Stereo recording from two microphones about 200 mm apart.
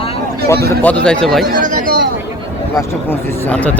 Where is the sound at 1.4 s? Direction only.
45° right (ahead or behind).